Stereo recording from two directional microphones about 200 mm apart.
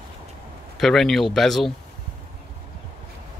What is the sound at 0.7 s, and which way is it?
Speech, centre (ahead or behind).